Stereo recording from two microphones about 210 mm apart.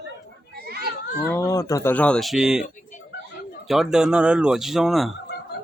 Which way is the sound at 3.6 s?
Centre (ahead or behind).